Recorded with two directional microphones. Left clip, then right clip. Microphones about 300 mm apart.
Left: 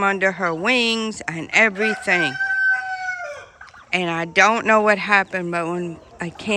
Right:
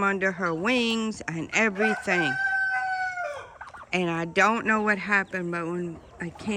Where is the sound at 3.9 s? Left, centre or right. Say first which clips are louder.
Left 6 dB; centre.